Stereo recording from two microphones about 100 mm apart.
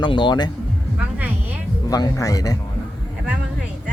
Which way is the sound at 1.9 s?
35° left (ahead or behind).